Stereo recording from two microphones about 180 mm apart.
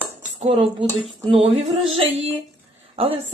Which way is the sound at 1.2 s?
30° right (ahead or behind).